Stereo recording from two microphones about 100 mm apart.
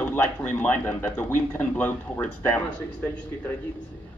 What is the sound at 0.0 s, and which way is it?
Speech, 20° left (ahead or behind).